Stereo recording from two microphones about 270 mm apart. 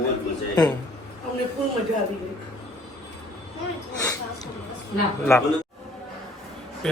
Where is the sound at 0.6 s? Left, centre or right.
Centre.